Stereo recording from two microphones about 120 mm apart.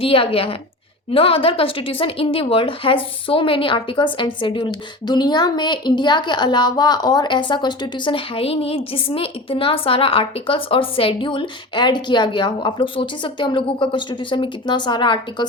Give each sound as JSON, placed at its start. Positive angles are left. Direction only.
{"t": 0.0, "sound": "a woman's voice", "side_deg": 50}